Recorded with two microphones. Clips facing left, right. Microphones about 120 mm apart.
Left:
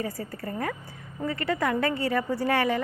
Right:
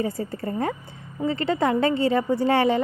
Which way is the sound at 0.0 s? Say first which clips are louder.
Right 6 dB; 25° right (ahead or behind).